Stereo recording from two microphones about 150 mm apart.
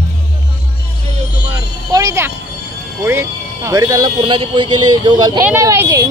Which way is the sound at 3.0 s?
15° right (ahead or behind).